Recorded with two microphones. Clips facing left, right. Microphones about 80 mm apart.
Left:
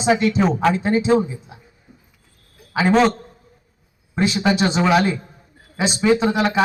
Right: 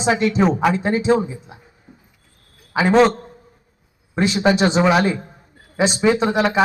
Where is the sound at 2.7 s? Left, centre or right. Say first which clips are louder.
Right 2 dB; centre.